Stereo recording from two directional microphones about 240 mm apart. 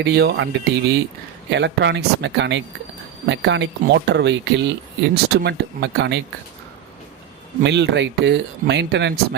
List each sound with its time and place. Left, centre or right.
0.0 s speech: right
7.6 s speech: right